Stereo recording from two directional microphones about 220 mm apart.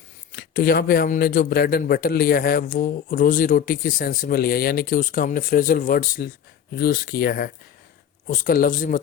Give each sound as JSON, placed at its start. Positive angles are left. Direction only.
{"t": 0.3, "sound": "a man's voice", "side_deg": 45}